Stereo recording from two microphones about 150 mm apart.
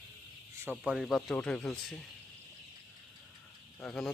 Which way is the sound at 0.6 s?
10° right (ahead or behind).